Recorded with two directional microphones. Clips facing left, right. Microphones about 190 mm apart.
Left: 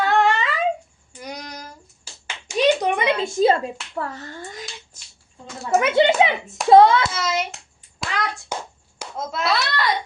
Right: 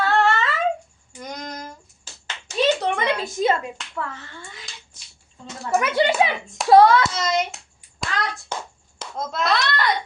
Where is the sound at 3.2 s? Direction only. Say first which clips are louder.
Left 6 dB; 30° left (ahead or behind).